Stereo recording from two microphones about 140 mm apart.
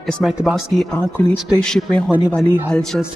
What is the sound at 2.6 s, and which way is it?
Speech, 5° left (ahead or behind).